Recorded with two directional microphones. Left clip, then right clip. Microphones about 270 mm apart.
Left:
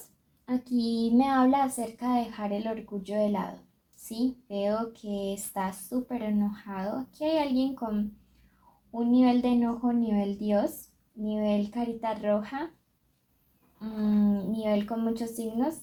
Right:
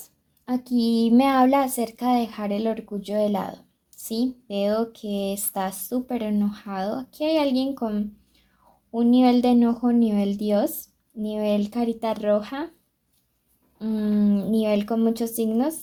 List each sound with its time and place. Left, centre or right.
0.4 s speech: right
4.4 s speech: right
13.7 s speech: right